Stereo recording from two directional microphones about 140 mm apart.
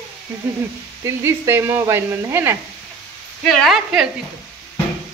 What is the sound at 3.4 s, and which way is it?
Speech, centre (ahead or behind).